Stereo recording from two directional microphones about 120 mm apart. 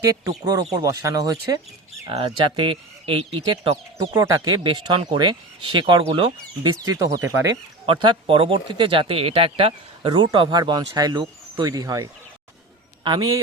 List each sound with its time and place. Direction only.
0.1 s speech: 30° right (ahead or behind)
2.0 s speech: 50° right (ahead or behind)
4.1 s speech: 30° right (ahead or behind)
4.6 s speech: 45° right (ahead or behind)
6.6 s speech: 30° right (ahead or behind)
7.9 s speech: 45° right (ahead or behind)
13.1 s speech: 35° right (ahead or behind)